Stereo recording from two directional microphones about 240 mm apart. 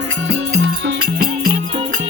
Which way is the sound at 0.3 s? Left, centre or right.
Right.